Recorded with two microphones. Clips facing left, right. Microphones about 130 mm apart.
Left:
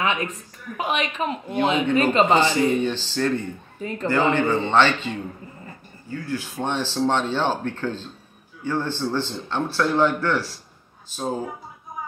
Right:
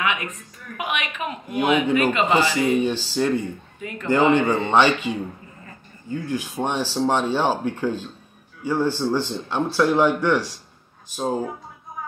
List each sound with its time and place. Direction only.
0.0 s a woman's voice: 30° left (ahead or behind)
2.3 s speech: 10° right (ahead or behind)